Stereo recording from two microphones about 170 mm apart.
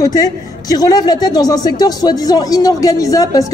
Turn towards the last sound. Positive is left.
turn(degrees=20)  # may be behind; listen again after turning